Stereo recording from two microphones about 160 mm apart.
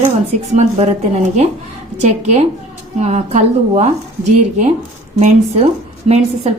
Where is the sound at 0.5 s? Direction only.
45° right (ahead or behind).